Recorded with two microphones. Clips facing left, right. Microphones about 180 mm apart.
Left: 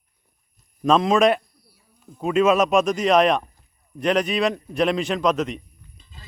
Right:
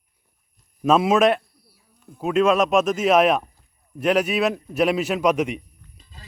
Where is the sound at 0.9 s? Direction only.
5° right (ahead or behind).